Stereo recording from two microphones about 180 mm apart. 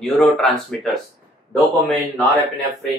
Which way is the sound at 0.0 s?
5° left (ahead or behind).